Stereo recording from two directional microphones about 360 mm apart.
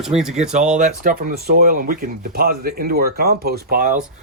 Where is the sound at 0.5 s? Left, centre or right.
Centre.